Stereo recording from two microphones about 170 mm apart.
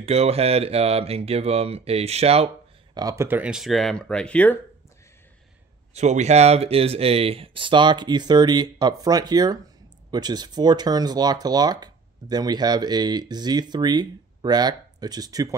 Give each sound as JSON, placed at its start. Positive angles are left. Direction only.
{"t": 0.0, "sound": "speech", "side_deg": -35}
{"t": 3.0, "sound": "speech", "side_deg": -20}
{"t": 5.9, "sound": "speech", "side_deg": -40}